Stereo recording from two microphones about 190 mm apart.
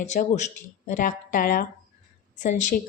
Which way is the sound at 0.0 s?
40° left (ahead or behind).